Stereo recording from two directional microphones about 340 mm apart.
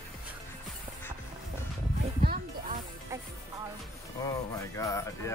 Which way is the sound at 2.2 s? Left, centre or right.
Right.